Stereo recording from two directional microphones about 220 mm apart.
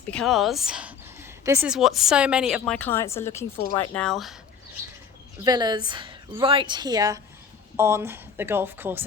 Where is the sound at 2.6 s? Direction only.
10° left (ahead or behind).